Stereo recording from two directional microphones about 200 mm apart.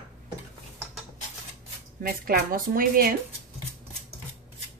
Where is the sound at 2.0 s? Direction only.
45° right (ahead or behind).